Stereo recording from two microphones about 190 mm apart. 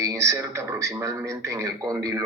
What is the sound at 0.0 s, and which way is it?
A man's voice, 15° right (ahead or behind).